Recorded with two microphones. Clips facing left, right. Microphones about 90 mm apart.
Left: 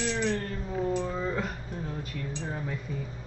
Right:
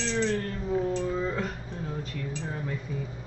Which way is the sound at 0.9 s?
5° left (ahead or behind).